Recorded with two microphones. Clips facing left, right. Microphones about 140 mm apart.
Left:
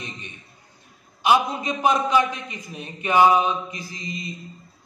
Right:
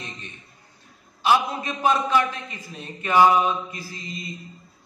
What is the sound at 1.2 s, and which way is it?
A man's voice, 15° left (ahead or behind).